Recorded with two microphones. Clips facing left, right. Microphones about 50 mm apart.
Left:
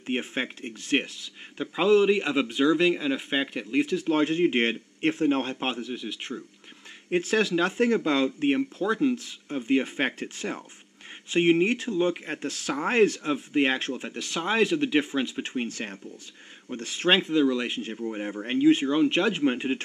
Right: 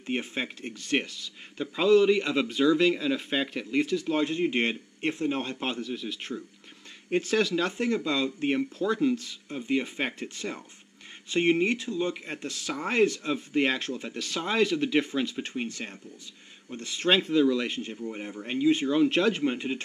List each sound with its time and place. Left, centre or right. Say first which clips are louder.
0.0 s speech: left 2 dB; left
2.1 s speech: left 1 dB; centre
4.0 s speech: left 4 dB; left
5.7 s speech: left 1 dB; centre
7.1 s speech: left 1 dB; left
8.5 s speech: left 2 dB; left
9.7 s speech: left 3 dB; left
10.4 s speech: left 3 dB; centre; by 13.2 s left
13.2 s speech: left 2 dB; left
15.3 s speech: left 2 dB; left
17.2 s speech: even; centre
18.2 s speech: left 4 dB; left
18.9 s speech: even; centre
19.4 s speech: left 3 dB; left